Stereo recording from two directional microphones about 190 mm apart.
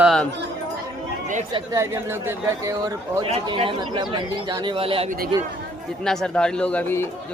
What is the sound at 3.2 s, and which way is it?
A man's voice, 30° right (ahead or behind).